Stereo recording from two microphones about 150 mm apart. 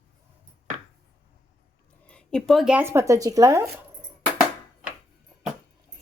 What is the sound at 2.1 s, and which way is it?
Speech, 5° left (ahead or behind).